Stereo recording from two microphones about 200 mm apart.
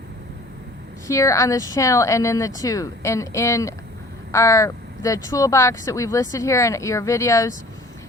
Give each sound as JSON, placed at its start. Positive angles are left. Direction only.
{"t": 1.0, "sound": "speech", "side_deg": 15}